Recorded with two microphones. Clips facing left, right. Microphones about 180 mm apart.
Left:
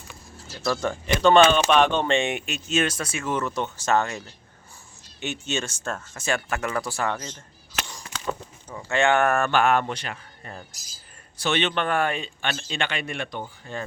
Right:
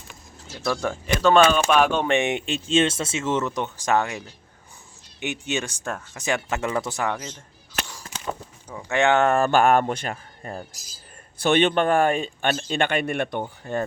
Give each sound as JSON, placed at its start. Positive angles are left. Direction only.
{"t": 0.6, "sound": "speech", "side_deg": -10}
{"t": 5.2, "sound": "speech", "side_deg": -15}
{"t": 8.9, "sound": "speech", "side_deg": -20}
{"t": 9.5, "sound": "speech", "side_deg": -45}
{"t": 11.4, "sound": "speech", "side_deg": -50}